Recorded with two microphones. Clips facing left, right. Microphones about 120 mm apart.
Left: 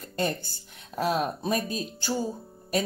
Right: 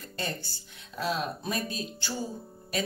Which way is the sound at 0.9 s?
40° left (ahead or behind).